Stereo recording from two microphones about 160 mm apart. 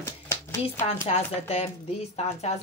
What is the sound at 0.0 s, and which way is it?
Shuffling cards, 15° left (ahead or behind).